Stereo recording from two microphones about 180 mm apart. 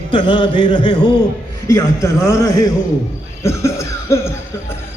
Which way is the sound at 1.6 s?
15° left (ahead or behind).